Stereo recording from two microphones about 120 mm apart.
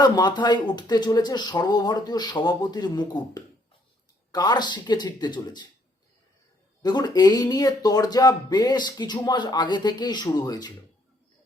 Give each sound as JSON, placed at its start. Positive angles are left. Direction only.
{"t": 0.0, "sound": "speech", "side_deg": 35}
{"t": 6.8, "sound": "speech", "side_deg": 35}